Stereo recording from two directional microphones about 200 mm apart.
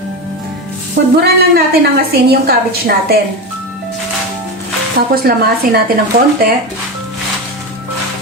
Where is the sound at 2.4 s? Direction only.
50° right (ahead or behind).